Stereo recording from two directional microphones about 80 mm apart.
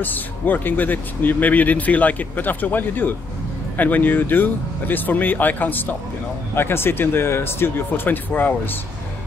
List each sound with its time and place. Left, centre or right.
0.0 s speech: left